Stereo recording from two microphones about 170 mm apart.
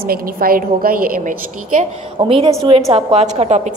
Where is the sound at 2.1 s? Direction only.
30° right (ahead or behind).